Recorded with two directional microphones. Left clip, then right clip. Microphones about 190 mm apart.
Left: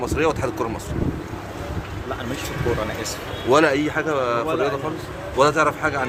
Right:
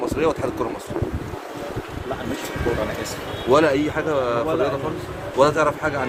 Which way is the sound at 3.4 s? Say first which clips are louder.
Even; 15° left (ahead or behind).